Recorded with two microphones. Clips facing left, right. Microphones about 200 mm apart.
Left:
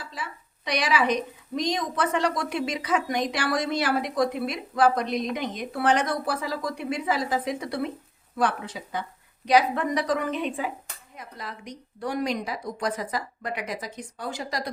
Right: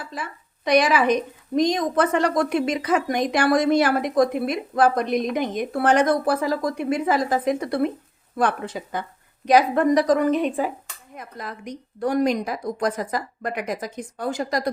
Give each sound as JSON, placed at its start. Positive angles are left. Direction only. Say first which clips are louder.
{"t": 0.0, "sound": "a woman's voice", "louder": "right 4 dB", "side_deg": -50}